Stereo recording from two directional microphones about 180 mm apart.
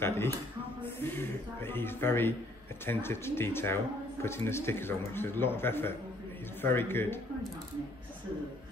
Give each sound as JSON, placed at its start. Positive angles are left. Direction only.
{"t": 0.0, "sound": "a man's voice", "side_deg": 15}